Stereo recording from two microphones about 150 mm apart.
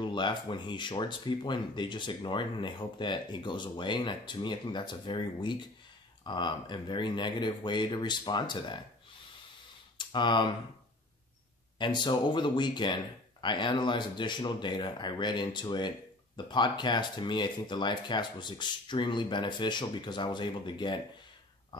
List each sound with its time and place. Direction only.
0.0 s speech: 30° left (ahead or behind)
9.9 s speech: 30° left (ahead or behind)
11.8 s speech: 30° left (ahead or behind)